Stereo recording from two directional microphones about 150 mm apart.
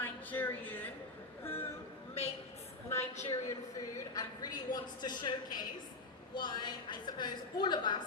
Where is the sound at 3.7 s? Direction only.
25° left (ahead or behind).